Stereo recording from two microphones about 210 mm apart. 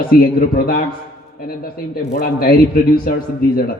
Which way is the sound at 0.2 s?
45° left (ahead or behind).